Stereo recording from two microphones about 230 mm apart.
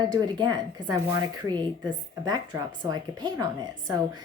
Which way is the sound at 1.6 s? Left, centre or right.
Centre.